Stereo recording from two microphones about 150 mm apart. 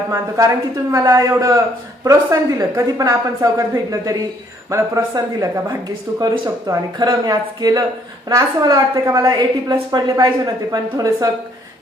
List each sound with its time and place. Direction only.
0.1 s a woman's voice: 20° right (ahead or behind)
4.7 s a woman's voice: 20° right (ahead or behind)